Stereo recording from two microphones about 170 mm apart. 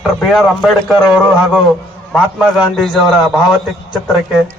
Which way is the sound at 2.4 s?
Centre (ahead or behind).